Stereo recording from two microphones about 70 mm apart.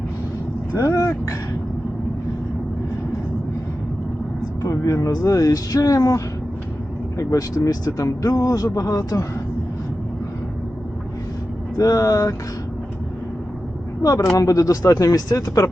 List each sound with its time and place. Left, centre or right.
0.7 s speech: left
4.6 s speech: left
11.8 s speech: left
14.0 s speech: left